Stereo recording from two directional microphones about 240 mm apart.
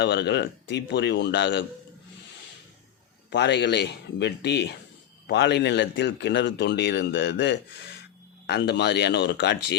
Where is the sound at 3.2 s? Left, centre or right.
Left.